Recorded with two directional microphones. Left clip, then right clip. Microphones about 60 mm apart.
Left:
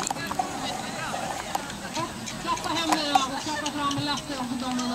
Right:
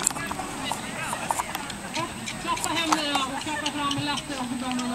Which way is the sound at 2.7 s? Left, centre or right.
Left.